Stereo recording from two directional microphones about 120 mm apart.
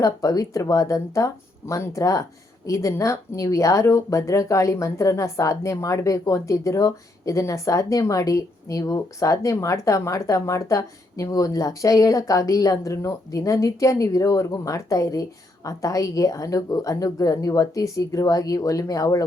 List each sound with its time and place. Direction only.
0.0 s speech: 30° left (ahead or behind)